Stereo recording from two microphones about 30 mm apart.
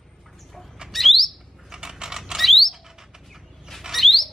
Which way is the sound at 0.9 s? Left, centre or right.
Centre.